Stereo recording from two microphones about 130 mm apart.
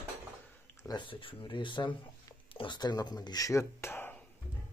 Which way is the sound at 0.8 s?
35° left (ahead or behind).